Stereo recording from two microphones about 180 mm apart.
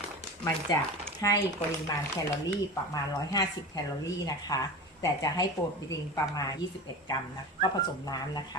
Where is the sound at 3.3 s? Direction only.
20° left (ahead or behind).